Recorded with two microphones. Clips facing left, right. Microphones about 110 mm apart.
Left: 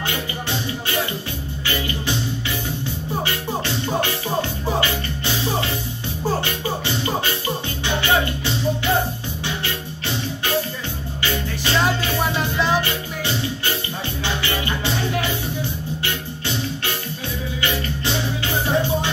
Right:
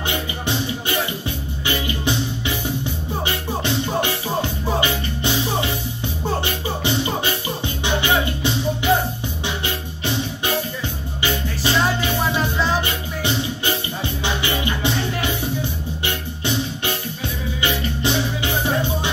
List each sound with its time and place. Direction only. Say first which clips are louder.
0.1 s music: right 2 dB; 20° right (ahead or behind)
3.3 s music: right 1 dB; 20° right (ahead or behind)
10.0 s music: right 2 dB; 20° right (ahead or behind)
17.6 s music: right 2 dB; 20° right (ahead or behind)